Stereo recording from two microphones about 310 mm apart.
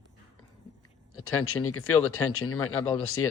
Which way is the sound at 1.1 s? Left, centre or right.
Left.